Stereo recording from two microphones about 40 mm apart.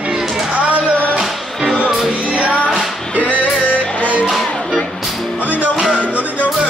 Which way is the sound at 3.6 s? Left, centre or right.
Left.